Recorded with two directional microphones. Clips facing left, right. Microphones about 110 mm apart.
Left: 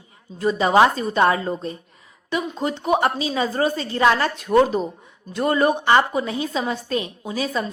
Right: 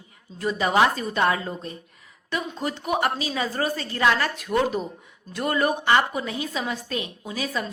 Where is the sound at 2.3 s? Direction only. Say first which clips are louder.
Left 4 dB; 20° left (ahead or behind).